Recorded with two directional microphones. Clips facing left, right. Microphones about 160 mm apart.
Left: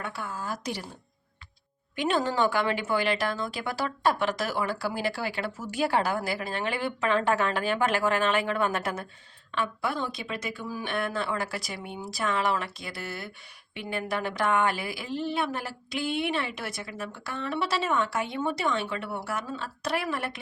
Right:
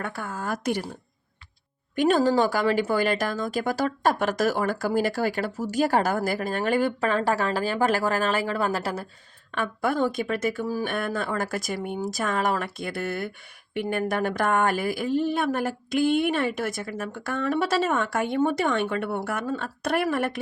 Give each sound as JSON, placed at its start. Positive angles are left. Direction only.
{"t": 0.0, "sound": "speech", "side_deg": -50}
{"t": 2.0, "sound": "speech", "side_deg": -45}
{"t": 9.5, "sound": "speech", "side_deg": -50}